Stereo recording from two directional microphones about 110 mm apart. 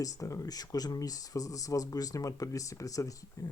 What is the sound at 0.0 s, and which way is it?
Speech, 30° left (ahead or behind).